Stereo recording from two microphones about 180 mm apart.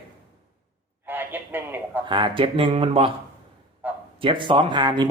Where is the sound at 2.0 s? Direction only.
25° right (ahead or behind).